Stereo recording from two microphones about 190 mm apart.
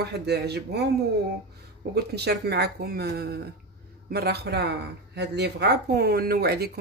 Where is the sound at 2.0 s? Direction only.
60° right (ahead or behind).